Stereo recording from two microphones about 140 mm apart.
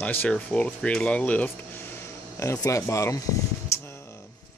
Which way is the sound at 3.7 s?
20° left (ahead or behind).